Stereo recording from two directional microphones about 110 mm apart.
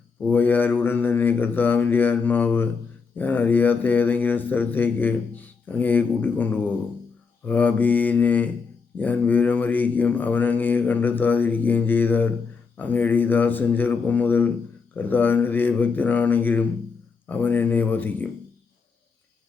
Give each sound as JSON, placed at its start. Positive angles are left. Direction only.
{"t": 0.3, "sound": "speech", "side_deg": 15}